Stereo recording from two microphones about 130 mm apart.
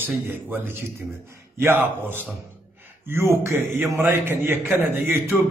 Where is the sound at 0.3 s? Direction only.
15° right (ahead or behind).